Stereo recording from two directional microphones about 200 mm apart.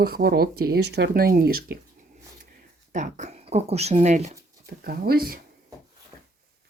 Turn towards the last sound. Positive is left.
turn(degrees=-50)  # may be behind; listen again after turning